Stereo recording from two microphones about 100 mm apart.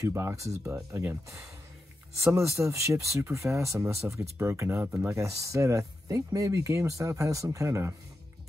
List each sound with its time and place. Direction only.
0.0 s speech: 30° right (ahead or behind)